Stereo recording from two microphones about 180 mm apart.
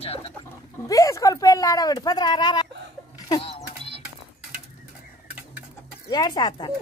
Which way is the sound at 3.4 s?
35° left (ahead or behind).